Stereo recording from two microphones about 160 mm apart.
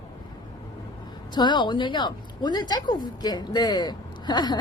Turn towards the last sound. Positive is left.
turn(degrees=25)  # may be behind; listen again after turning